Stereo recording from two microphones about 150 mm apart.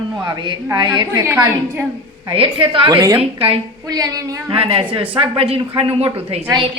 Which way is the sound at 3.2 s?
40° right (ahead or behind).